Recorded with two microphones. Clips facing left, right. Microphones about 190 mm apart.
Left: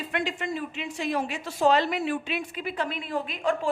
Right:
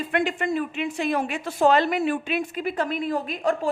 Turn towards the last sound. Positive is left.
turn(degrees=-45)  # may be behind; listen again after turning